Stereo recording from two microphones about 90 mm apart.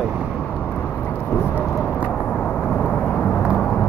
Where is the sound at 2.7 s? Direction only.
10° left (ahead or behind).